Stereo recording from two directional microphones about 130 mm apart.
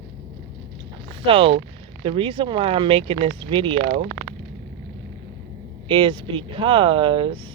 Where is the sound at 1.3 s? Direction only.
45° right (ahead or behind).